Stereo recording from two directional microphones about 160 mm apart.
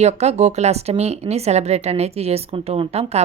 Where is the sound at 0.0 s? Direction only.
45° right (ahead or behind).